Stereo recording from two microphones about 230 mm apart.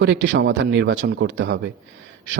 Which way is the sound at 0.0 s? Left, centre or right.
Right.